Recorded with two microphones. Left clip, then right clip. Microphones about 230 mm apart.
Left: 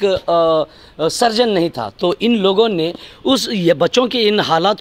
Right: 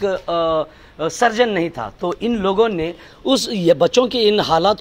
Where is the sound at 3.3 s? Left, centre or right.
Left.